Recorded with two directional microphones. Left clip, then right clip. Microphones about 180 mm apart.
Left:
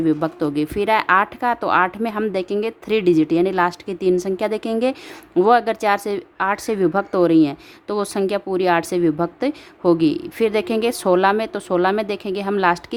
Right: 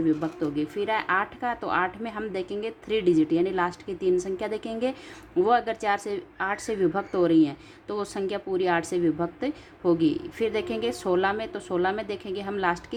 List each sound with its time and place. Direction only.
0.0 s speech: 40° left (ahead or behind)